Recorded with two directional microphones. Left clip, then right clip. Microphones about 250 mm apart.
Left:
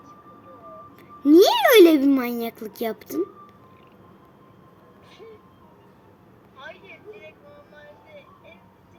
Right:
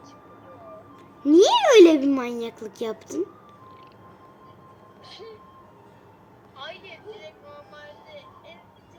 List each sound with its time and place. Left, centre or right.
1.2 s speech: left